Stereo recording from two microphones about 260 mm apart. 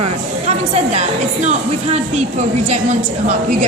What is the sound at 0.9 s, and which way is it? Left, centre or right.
A woman's voice, right.